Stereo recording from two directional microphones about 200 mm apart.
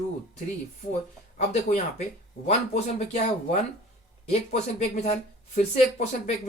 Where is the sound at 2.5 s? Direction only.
30° left (ahead or behind).